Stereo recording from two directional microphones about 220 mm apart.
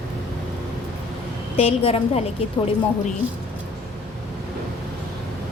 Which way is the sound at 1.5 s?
25° left (ahead or behind).